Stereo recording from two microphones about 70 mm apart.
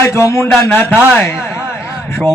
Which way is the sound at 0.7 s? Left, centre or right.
Left.